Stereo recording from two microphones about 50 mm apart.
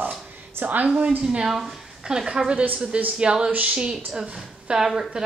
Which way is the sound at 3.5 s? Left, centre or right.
Right.